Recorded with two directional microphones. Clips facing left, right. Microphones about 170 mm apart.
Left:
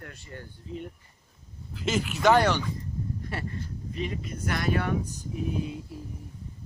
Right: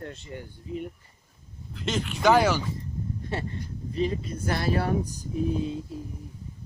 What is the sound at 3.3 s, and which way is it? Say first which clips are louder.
Speech: right 2 dB; 25° right (ahead or behind).